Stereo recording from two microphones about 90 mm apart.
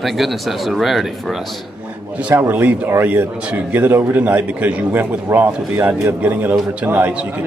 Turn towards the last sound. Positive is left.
turn(degrees=-15)  # may be behind; listen again after turning